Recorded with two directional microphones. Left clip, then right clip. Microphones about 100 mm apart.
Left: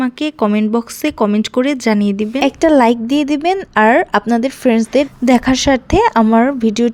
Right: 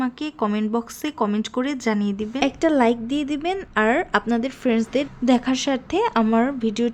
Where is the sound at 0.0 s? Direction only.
90° left.